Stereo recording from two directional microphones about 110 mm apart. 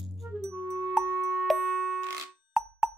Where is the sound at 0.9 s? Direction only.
Centre (ahead or behind).